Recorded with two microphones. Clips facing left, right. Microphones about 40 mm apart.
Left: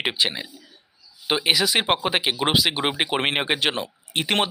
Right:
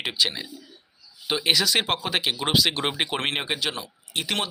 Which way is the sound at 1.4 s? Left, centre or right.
Centre.